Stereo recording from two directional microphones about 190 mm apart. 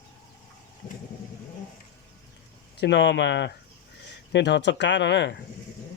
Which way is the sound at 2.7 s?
65° left (ahead or behind).